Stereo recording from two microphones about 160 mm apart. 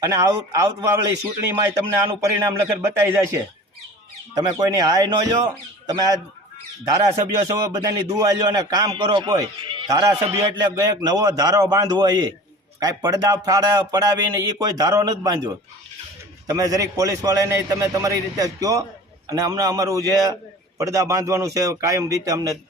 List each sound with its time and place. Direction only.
0.1 s a man's voice: 20° right (ahead or behind)
7.4 s a man's voice: 25° right (ahead or behind)
16.5 s a man's voice: 20° right (ahead or behind)